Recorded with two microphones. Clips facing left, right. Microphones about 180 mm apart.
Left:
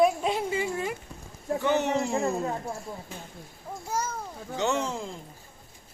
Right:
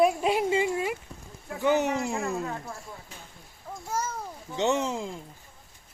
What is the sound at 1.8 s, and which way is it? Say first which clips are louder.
Speech: left 2 dB; 30° left (ahead or behind).